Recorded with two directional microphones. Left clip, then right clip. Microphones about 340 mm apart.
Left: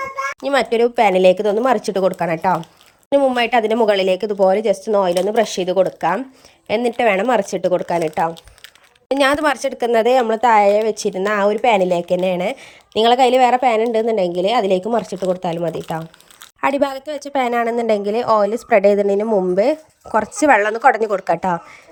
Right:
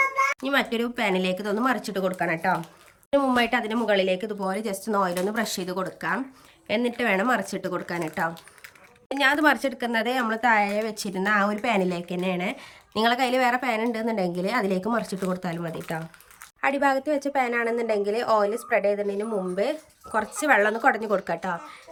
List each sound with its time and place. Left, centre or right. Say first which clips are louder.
0.4 s speech: left 9 dB; centre
9.1 s speech: left 5 dB; centre